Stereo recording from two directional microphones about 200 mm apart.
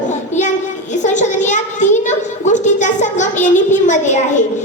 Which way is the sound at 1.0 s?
35° left (ahead or behind).